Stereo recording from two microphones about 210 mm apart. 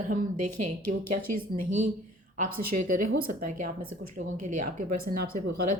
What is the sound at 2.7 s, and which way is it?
Speech, 35° right (ahead or behind).